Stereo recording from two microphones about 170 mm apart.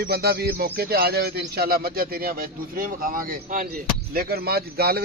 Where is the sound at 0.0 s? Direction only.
65° right (ahead or behind).